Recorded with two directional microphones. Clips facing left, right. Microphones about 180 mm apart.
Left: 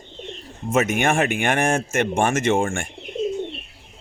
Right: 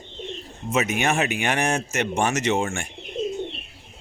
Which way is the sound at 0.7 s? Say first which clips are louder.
Left 3 dB; 50° left (ahead or behind).